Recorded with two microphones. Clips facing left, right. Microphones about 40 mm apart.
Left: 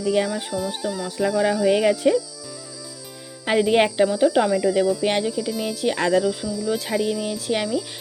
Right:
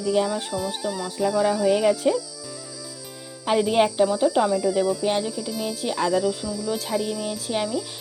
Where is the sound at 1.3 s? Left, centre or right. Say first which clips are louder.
Left 1 dB; left.